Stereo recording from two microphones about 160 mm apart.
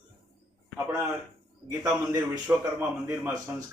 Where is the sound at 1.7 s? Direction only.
20° right (ahead or behind).